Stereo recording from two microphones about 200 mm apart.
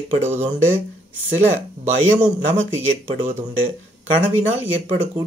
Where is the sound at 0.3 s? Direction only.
10° right (ahead or behind).